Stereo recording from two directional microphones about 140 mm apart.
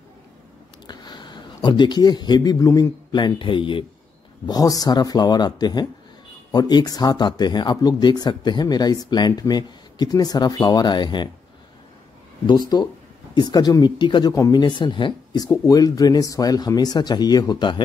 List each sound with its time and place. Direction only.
0.8 s a man's voice: 30° left (ahead or behind)
12.4 s speech: 30° left (ahead or behind)